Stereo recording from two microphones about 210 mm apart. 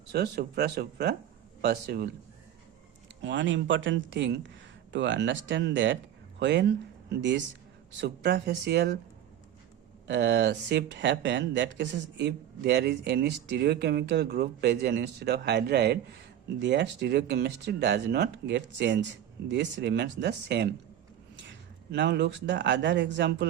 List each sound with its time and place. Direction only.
0.1 s speech: 50° right (ahead or behind)
3.2 s speech: 60° right (ahead or behind)
10.1 s speech: 55° right (ahead or behind)
21.9 s speech: 55° right (ahead or behind)